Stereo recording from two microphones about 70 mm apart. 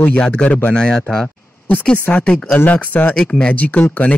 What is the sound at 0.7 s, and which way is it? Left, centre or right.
Speech, centre.